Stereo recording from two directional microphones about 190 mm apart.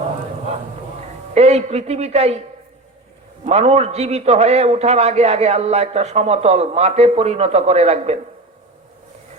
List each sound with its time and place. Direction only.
1.3 s a man's voice: 35° right (ahead or behind)
3.4 s a man's voice: 35° right (ahead or behind)